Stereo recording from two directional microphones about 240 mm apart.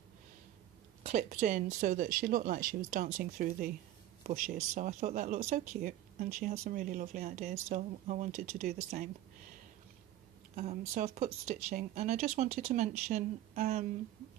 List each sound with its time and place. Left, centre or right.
1.0 s speech: right
10.5 s speech: right